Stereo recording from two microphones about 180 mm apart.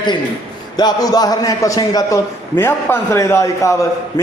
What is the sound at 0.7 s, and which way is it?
A man's voice, 20° left (ahead or behind).